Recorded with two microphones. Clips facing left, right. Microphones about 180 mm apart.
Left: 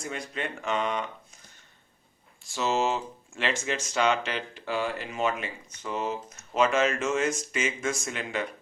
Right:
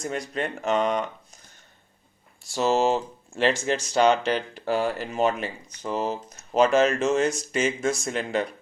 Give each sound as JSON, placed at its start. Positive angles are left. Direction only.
{"t": 0.0, "sound": "speech", "side_deg": -40}
{"t": 2.6, "sound": "speech", "side_deg": -35}